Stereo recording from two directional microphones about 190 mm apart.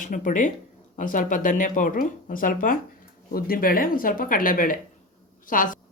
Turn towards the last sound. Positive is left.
turn(degrees=45)  # may be behind; listen again after turning